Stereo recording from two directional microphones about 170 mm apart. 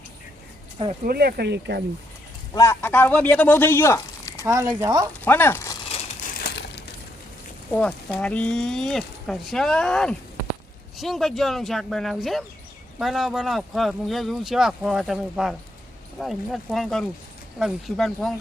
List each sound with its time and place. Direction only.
1.0 s speech: 65° right (ahead or behind); by 1.8 s 80° right
2.5 s speech: 15° left (ahead or behind)
6.3 s a sound: 70° left (ahead or behind)
7.7 s speech: 5° left (ahead or behind)